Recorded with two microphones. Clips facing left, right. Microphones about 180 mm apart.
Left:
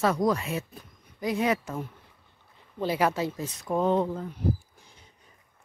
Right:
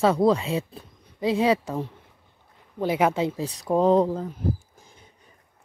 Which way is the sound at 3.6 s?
35° right (ahead or behind).